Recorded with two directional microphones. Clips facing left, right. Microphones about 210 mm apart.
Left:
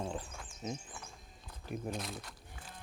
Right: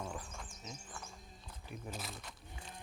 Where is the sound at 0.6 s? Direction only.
55° left (ahead or behind).